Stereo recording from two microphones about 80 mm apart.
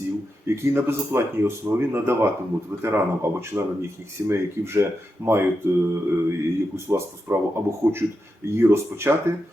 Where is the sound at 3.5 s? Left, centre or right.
Right.